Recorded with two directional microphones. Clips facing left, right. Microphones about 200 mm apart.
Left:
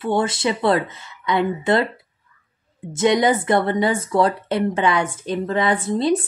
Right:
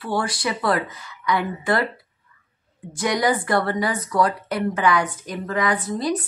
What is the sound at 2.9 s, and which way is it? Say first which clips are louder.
Speech: left 5 dB; 25° left (ahead or behind).